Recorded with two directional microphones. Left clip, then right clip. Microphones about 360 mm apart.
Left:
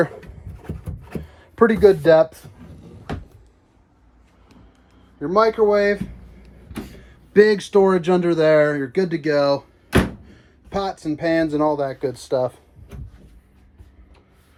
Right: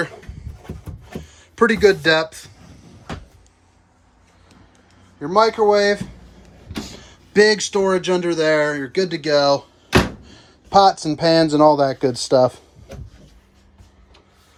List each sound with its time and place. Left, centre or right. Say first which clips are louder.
1.2 s speech: even; centre
5.2 s speech: right 1 dB; centre
6.8 s a sound: right 6 dB; centre
7.4 s speech: left 1 dB; centre
10.2 s speech: right 7 dB; centre
11.7 s speech: right 6 dB; right